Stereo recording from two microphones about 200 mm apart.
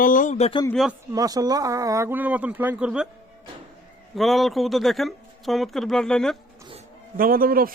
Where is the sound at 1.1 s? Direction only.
20° right (ahead or behind).